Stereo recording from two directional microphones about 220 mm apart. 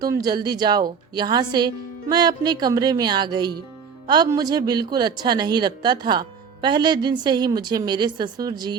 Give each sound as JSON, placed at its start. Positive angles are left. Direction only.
{"t": 0.0, "sound": "speech", "side_deg": -15}